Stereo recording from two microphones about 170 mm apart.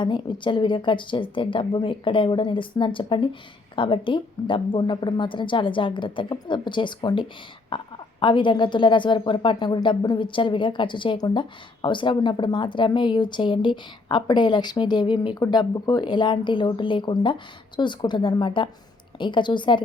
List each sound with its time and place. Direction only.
0.0 s a woman's voice: 30° left (ahead or behind)